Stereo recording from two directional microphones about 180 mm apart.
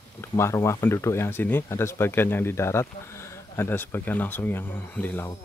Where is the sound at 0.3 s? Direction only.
15° left (ahead or behind).